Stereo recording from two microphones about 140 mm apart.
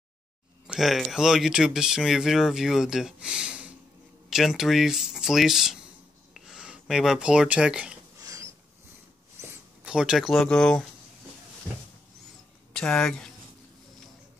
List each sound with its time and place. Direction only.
0.7 s speech: centre (ahead or behind)
8.2 s a sound: 20° right (ahead or behind)
9.8 s speech: 5° right (ahead or behind)
12.7 s speech: 5° left (ahead or behind)